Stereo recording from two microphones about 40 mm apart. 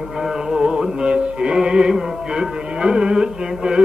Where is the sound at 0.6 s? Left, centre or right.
Centre.